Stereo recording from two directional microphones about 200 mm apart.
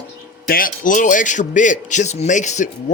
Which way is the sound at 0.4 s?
45° left (ahead or behind).